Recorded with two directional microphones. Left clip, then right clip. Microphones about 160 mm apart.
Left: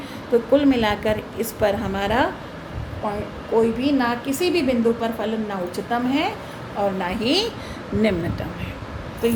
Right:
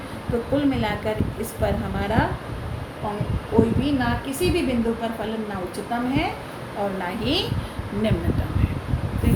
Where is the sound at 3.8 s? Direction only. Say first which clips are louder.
Left 3 dB; 60° left (ahead or behind).